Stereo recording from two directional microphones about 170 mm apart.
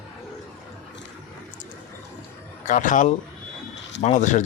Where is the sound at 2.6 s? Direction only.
50° left (ahead or behind).